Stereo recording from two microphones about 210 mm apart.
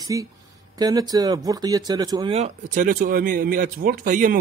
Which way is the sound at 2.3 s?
35° right (ahead or behind).